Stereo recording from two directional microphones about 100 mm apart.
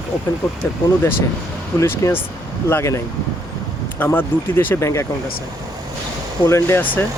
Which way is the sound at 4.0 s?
20° left (ahead or behind).